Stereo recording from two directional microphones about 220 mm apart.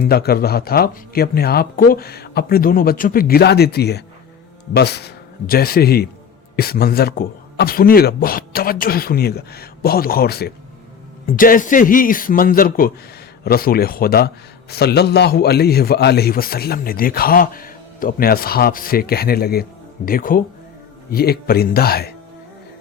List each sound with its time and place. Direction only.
0.0 s a man's voice: 45° left (ahead or behind)